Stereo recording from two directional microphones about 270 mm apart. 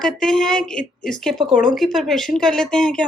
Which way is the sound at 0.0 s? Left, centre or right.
Centre.